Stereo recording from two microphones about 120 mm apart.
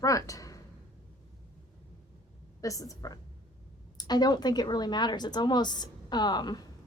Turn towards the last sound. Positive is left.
turn(degrees=35)  # may be behind; listen again after turning